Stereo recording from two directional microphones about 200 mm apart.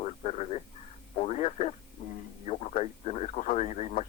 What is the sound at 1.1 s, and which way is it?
Radio, 35° left (ahead or behind).